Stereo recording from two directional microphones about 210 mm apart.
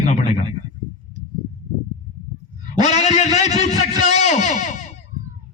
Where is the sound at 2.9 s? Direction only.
30° left (ahead or behind).